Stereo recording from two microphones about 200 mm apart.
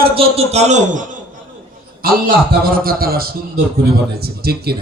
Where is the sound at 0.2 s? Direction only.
30° right (ahead or behind).